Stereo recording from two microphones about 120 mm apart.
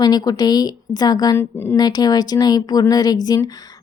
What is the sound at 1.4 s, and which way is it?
Speech, 20° left (ahead or behind).